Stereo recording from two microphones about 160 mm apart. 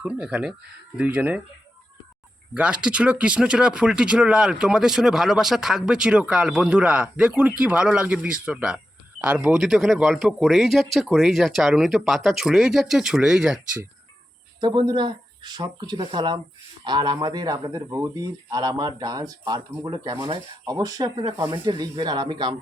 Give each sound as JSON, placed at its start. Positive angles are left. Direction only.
{"t": 0.0, "sound": "speech", "side_deg": -5}
{"t": 2.6, "sound": "speech", "side_deg": -5}
{"t": 14.6, "sound": "speech", "side_deg": -25}